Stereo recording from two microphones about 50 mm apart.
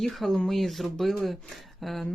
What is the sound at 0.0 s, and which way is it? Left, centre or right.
Speech, centre.